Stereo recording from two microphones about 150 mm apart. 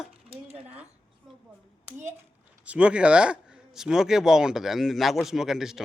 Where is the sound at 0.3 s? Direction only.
40° right (ahead or behind).